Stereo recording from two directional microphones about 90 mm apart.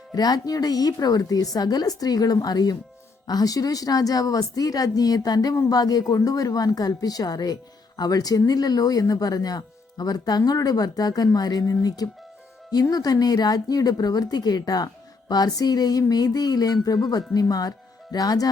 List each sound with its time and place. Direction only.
0.1 s speech: 45° left (ahead or behind)